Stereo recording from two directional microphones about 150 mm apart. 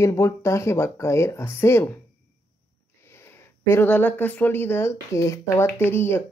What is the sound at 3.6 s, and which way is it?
Speech, 15° left (ahead or behind).